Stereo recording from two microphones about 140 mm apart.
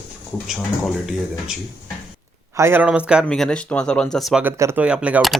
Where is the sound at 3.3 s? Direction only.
5° left (ahead or behind).